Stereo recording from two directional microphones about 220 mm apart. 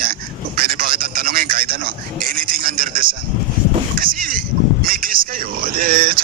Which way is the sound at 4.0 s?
40° right (ahead or behind).